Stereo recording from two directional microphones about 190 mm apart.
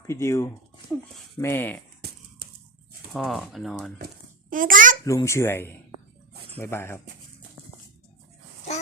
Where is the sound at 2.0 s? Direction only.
60° right (ahead or behind).